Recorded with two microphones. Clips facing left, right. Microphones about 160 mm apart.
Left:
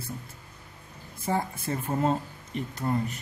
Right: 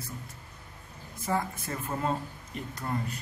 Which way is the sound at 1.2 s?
30° left (ahead or behind).